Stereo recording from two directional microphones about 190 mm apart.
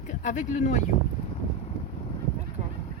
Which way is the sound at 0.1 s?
40° left (ahead or behind).